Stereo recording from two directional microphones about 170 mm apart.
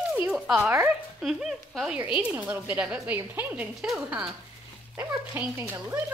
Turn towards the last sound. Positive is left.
turn(degrees=-10)  # may be behind; listen again after turning